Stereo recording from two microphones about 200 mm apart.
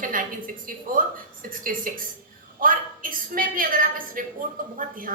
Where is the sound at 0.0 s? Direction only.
45° right (ahead or behind).